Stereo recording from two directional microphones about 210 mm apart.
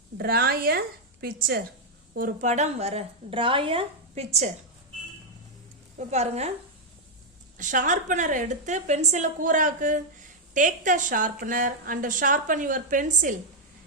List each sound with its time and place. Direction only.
0.2 s a woman's voice: 50° right (ahead or behind); by 4.5 s 30° right (ahead or behind)
6.0 s a woman's voice: 30° right (ahead or behind)
7.6 s a woman's voice: 40° right (ahead or behind)